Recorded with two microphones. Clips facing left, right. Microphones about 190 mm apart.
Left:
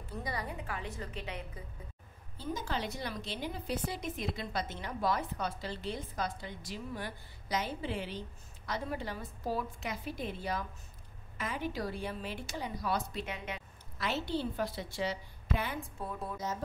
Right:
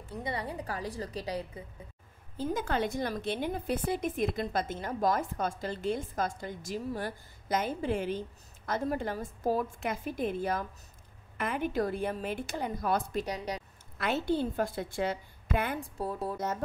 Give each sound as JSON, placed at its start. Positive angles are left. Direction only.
{"t": 0.2, "sound": "a woman's voice", "side_deg": -30}
{"t": 2.5, "sound": "a woman's voice", "side_deg": -55}
{"t": 13.9, "sound": "a woman's voice", "side_deg": -55}
{"t": 16.0, "sound": "a woman's voice", "side_deg": -35}